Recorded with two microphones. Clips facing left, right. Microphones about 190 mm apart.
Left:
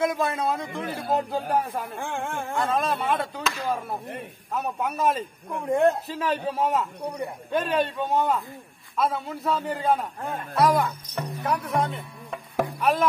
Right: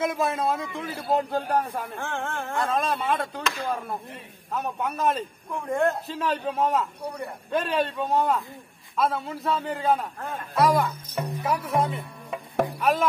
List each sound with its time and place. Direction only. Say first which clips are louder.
0.0 s a man's voice: even; centre (ahead or behind)
5.7 s a man's voice: left 3 dB; 20° left (ahead or behind)
6.0 s speech: left 1 dB; 5° left (ahead or behind)